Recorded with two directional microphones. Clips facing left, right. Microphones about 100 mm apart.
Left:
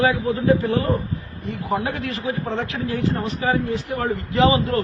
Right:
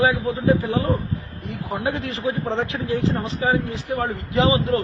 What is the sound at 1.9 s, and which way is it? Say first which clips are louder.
A man's voice: right 1 dB; 20° right (ahead or behind).